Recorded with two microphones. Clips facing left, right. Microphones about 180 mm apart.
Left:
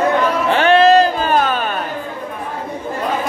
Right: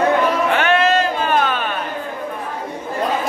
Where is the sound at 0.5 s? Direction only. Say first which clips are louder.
Left 9 dB; 30° left (ahead or behind).